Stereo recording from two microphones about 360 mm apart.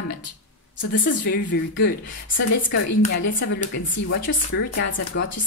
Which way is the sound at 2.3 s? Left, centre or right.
Left.